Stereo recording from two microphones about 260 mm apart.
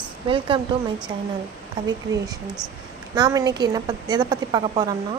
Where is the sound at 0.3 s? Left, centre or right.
Centre.